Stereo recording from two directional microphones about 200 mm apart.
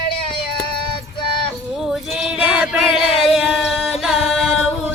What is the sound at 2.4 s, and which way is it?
Singing, 5° right (ahead or behind).